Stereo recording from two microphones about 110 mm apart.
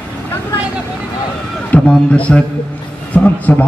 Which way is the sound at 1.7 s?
10° left (ahead or behind).